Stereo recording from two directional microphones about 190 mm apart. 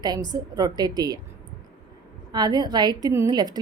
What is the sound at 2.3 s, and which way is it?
A woman's voice, 20° right (ahead or behind).